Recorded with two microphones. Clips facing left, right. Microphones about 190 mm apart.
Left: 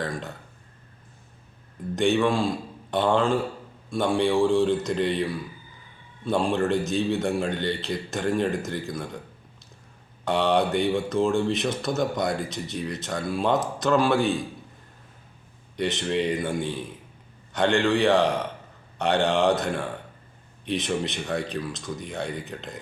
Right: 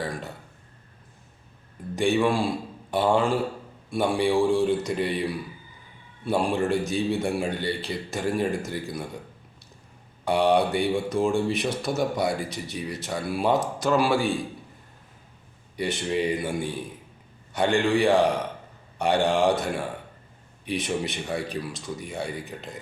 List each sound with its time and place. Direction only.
0.0 s speech: 10° right (ahead or behind)
2.0 s speech: 10° right (ahead or behind)
10.2 s speech: 10° right (ahead or behind)
15.7 s speech: 10° right (ahead or behind)